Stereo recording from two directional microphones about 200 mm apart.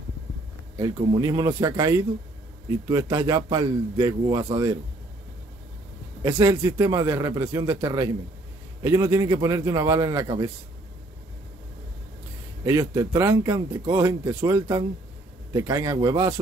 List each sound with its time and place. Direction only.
0.7 s speech: 20° right (ahead or behind)
6.2 s speech: 20° right (ahead or behind)
12.6 s speech: 15° right (ahead or behind)